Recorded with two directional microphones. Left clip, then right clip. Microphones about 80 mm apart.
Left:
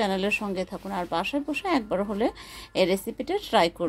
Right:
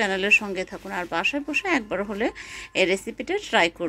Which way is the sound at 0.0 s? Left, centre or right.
Left.